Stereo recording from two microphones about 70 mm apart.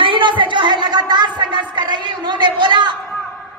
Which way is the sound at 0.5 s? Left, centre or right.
Right.